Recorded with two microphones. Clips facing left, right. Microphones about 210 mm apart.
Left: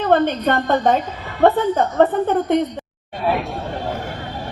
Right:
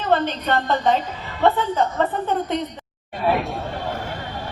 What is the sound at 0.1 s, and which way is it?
A woman's voice, 50° left (ahead or behind).